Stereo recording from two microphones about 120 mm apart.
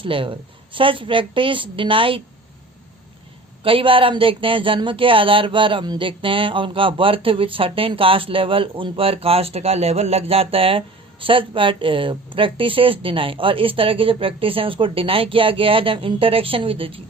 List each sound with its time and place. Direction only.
0.0 s speech: 45° right (ahead or behind)
3.6 s speech: 50° right (ahead or behind)